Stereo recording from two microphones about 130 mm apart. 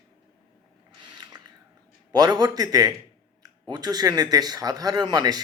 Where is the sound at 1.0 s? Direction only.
35° right (ahead or behind).